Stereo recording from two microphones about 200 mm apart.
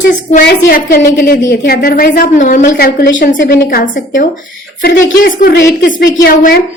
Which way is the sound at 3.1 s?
40° left (ahead or behind).